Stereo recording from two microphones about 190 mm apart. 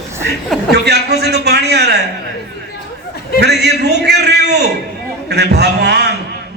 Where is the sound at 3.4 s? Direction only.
60° right (ahead or behind).